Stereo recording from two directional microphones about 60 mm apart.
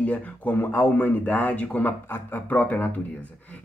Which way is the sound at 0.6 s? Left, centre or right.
Left.